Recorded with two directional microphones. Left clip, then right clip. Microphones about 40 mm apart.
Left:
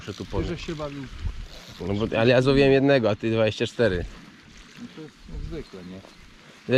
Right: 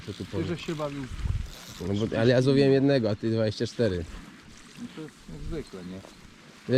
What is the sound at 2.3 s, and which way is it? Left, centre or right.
Speech, left.